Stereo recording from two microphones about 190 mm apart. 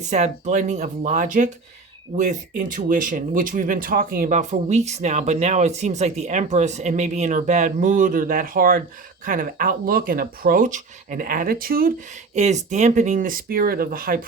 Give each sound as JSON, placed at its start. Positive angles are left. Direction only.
{"t": 0.0, "sound": "speech", "side_deg": -40}
{"t": 12.3, "sound": "speech", "side_deg": -35}